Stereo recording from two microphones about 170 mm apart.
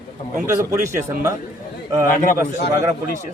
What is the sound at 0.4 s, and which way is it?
Speech, 15° right (ahead or behind).